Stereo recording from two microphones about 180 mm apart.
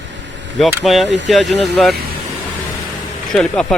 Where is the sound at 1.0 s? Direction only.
80° right.